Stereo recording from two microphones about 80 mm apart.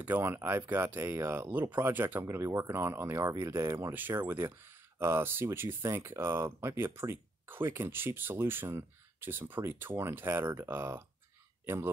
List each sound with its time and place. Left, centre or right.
0.0 s speech: right
3.9 s speech: right